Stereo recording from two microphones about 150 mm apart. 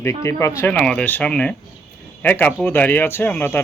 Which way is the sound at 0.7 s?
5° left (ahead or behind).